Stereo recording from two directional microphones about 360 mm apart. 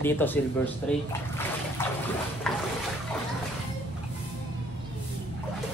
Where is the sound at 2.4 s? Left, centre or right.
Centre.